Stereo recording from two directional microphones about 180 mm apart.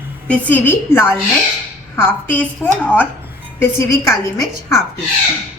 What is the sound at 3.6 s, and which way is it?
A woman's voice, 15° left (ahead or behind).